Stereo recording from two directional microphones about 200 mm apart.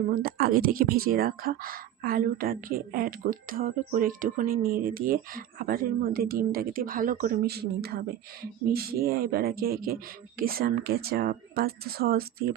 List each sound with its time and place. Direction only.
0.1 s speech: 50° right (ahead or behind)